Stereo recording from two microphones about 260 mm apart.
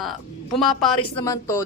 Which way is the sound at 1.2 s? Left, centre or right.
Centre.